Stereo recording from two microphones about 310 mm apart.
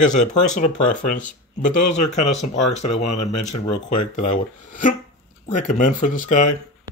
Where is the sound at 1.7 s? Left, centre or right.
Left.